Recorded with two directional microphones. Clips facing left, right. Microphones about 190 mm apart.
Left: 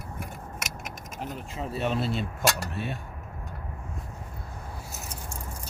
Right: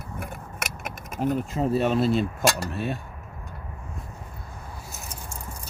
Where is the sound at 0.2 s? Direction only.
60° right (ahead or behind).